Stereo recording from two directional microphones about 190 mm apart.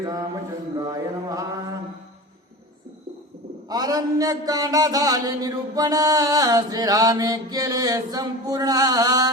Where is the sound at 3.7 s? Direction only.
20° right (ahead or behind).